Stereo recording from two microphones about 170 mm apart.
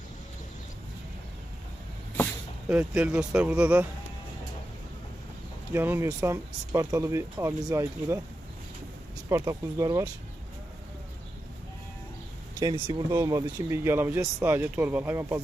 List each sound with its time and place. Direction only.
2.6 s speech: 5° right (ahead or behind)
5.7 s speech: 15° right (ahead or behind)
9.3 s speech: 20° right (ahead or behind)
12.5 s speech: 25° right (ahead or behind)